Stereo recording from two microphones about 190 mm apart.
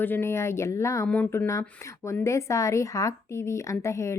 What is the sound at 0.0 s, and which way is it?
A woman's voice, 10° left (ahead or behind).